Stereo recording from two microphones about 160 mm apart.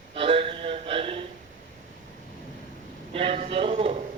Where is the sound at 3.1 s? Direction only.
35° right (ahead or behind).